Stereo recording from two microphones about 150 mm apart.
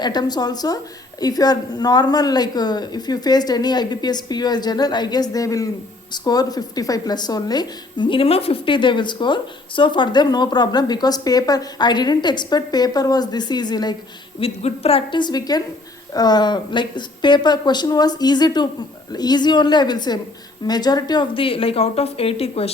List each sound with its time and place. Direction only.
0.0 s a woman's voice: 30° left (ahead or behind)
14.3 s a woman's voice: 40° left (ahead or behind)